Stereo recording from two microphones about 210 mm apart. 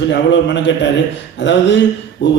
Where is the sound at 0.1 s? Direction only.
55° left (ahead or behind).